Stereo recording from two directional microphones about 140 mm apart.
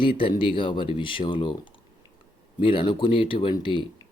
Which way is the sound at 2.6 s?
35° left (ahead or behind).